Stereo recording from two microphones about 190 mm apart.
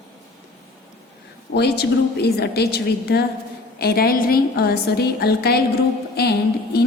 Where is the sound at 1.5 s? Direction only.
60° left (ahead or behind).